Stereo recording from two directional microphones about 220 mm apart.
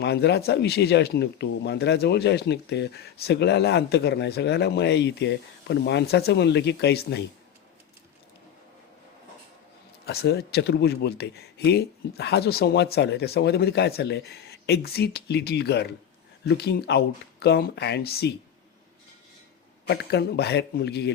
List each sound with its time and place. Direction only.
0.0 s speech: 50° left (ahead or behind)
10.1 s speech: 45° left (ahead or behind)
19.9 s speech: 50° left (ahead or behind)